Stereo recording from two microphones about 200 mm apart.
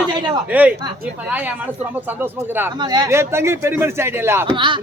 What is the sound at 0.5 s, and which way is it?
A man's voice, 5° right (ahead or behind).